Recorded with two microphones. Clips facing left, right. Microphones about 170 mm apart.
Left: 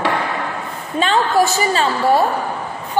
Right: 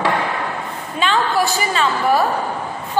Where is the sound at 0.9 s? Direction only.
40° left (ahead or behind).